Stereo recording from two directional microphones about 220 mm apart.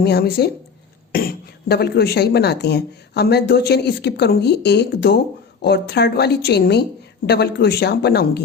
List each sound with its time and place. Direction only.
0.0 s speech: 45° left (ahead or behind)